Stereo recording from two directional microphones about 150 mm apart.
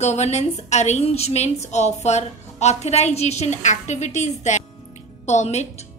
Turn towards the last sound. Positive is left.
turn(degrees=45)  # may be behind; listen again after turning